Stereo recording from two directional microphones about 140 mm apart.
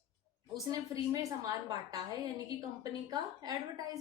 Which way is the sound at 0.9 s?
25° right (ahead or behind).